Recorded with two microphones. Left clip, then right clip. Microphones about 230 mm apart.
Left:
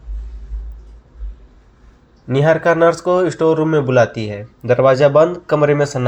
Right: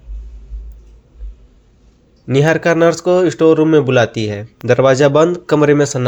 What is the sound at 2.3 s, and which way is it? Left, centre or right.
Speech, right.